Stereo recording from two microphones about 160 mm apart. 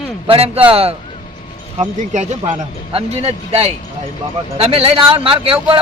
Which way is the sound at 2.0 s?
50° right (ahead or behind).